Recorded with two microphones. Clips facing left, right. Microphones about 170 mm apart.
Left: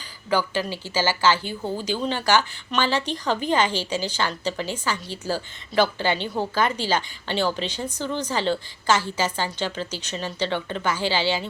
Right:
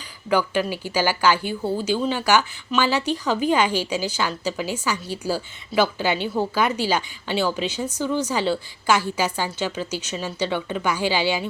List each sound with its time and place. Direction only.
0.6 s speech: 15° right (ahead or behind)